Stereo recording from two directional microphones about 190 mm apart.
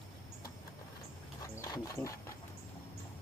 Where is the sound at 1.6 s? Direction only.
15° left (ahead or behind).